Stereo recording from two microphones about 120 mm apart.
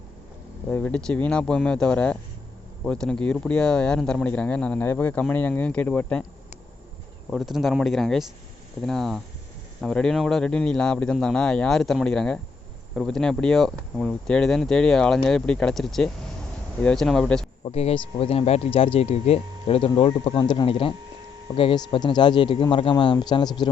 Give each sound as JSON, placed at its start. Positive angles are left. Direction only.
{"t": 0.7, "sound": "speech", "side_deg": 10}
{"t": 7.3, "sound": "speech", "side_deg": 0}
{"t": 17.6, "sound": "speech", "side_deg": 60}
{"t": 20.4, "sound": "speech", "side_deg": 35}
{"t": 20.7, "sound": "speech", "side_deg": 50}